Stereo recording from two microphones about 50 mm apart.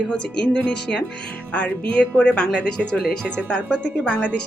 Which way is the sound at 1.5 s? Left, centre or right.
Left.